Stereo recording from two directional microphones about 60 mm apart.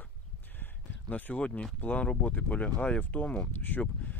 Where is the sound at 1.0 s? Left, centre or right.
Left.